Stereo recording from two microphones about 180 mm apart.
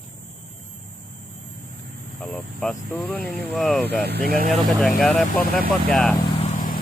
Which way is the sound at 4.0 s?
60° right (ahead or behind).